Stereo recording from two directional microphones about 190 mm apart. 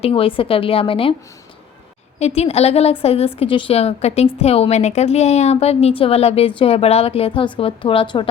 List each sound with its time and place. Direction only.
0.0 s speech: 30° left (ahead or behind)
2.1 s a woman's voice: 35° left (ahead or behind)